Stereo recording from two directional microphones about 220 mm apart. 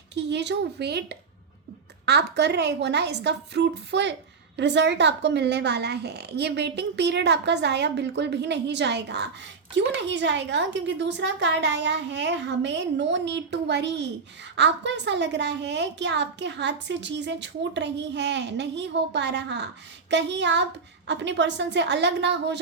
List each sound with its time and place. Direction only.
0.1 s a woman's voice: 50° right (ahead or behind)
2.0 s a woman's voice: 50° right (ahead or behind)